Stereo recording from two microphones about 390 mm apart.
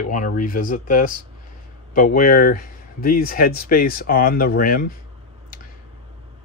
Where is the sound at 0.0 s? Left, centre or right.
Left.